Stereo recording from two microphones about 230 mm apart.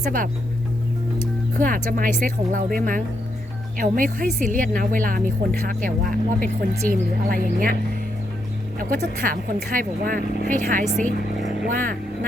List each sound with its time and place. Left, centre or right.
0.0 s speech: right
1.5 s speech: right
8.8 s speech: right